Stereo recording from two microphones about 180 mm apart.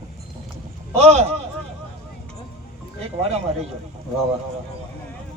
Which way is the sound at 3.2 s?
35° right (ahead or behind).